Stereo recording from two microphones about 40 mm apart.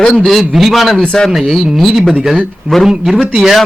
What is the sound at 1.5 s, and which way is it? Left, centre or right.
A man's voice, centre.